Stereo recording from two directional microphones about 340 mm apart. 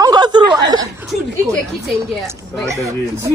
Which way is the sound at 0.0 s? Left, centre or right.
Centre.